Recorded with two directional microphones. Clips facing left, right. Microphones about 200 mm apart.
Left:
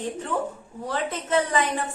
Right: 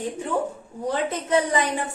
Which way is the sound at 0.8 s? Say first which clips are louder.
Right 3 dB; 15° right (ahead or behind).